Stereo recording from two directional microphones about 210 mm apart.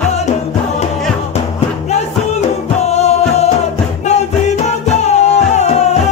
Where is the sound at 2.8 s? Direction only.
30° left (ahead or behind).